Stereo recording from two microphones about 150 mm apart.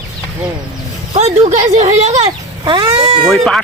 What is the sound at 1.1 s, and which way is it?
Speech, 50° right (ahead or behind).